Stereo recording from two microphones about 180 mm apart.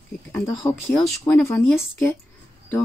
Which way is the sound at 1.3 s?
15° left (ahead or behind).